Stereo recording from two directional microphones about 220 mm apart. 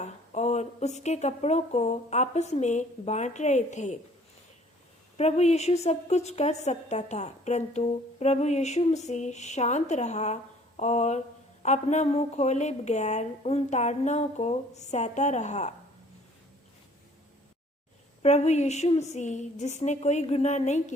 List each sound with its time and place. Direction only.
0.0 s a woman's voice: 30° left (ahead or behind)
5.1 s a woman's voice: 30° left (ahead or behind)
18.2 s a woman's voice: 30° left (ahead or behind)